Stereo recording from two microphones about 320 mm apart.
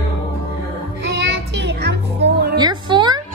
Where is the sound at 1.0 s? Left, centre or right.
Right.